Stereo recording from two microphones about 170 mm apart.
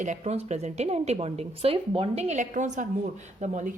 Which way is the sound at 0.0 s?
40° right (ahead or behind).